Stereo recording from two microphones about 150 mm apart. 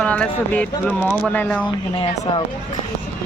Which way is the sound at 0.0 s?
5° left (ahead or behind).